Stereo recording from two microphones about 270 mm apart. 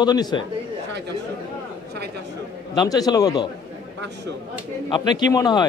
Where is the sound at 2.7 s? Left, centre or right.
Centre.